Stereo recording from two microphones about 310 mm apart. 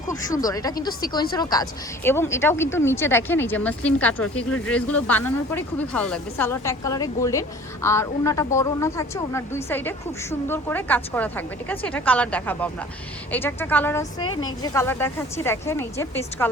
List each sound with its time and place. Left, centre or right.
0.1 s speech: centre